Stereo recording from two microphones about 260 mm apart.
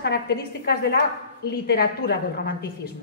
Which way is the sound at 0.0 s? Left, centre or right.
Left.